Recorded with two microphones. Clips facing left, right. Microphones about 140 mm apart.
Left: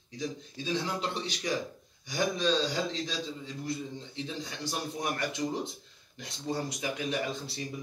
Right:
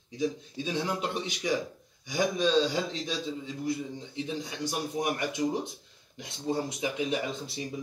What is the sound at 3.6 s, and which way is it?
A man's voice, 15° right (ahead or behind).